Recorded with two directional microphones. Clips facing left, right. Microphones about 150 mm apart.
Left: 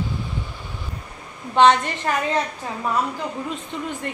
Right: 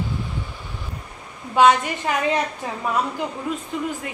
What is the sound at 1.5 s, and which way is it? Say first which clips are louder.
Speech: even; 5° right (ahead or behind).